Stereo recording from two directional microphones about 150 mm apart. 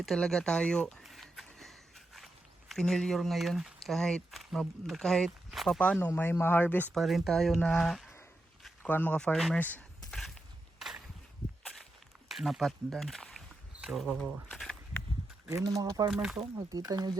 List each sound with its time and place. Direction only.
0.0 s speech: centre (ahead or behind)
6.9 s speech: centre (ahead or behind)
8.8 s speech: 10° left (ahead or behind)
10.1 s a sound: centre (ahead or behind)
12.3 s speech: centre (ahead or behind)
14.5 s walk: 5° left (ahead or behind)
15.4 s speech: 20° right (ahead or behind)
16.0 s speech: centre (ahead or behind)
16.6 s speech: 25° right (ahead or behind)